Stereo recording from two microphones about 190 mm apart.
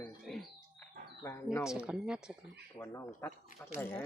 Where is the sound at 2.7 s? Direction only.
10° left (ahead or behind).